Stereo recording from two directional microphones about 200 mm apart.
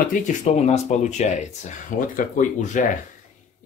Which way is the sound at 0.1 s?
35° left (ahead or behind).